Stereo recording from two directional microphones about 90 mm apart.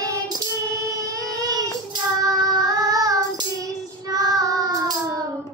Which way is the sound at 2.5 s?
45° right (ahead or behind).